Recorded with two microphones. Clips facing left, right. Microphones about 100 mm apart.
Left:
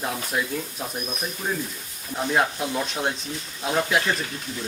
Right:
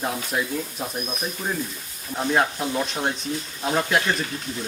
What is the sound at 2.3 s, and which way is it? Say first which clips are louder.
Speech: right 1 dB; centre (ahead or behind).